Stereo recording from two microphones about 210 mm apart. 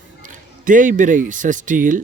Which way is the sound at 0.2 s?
40° right (ahead or behind).